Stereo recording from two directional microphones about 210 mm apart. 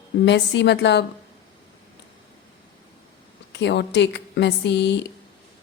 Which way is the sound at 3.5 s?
55° left (ahead or behind).